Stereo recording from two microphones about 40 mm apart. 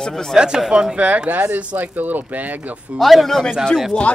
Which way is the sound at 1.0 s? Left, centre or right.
Right.